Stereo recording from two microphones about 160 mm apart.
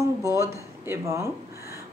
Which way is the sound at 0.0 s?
20° right (ahead or behind).